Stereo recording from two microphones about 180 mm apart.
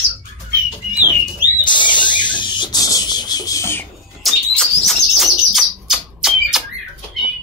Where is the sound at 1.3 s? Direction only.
25° left (ahead or behind).